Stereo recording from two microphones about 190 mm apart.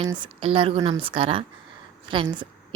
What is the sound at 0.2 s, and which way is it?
A woman's voice, 30° right (ahead or behind).